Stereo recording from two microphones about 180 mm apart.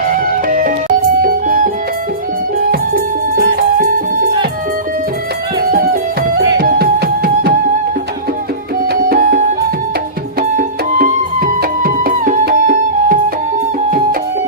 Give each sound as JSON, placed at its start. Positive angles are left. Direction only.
{"t": 0.1, "sound": "music", "side_deg": -50}
{"t": 2.9, "sound": "music", "side_deg": -55}
{"t": 5.7, "sound": "music", "side_deg": -55}
{"t": 8.9, "sound": "music", "side_deg": -55}
{"t": 10.6, "sound": "music", "side_deg": -50}